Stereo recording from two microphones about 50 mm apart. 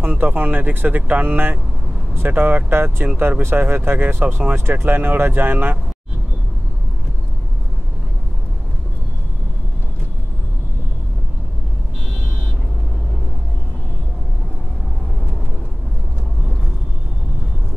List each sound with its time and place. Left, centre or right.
0.0 s speech: right